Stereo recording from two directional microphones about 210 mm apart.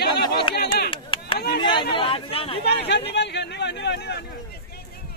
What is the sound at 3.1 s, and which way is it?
Speech, 55° left (ahead or behind).